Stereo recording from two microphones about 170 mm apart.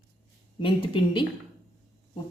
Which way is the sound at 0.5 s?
30° left (ahead or behind).